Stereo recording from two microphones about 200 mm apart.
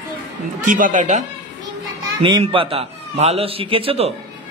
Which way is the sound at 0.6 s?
40° right (ahead or behind).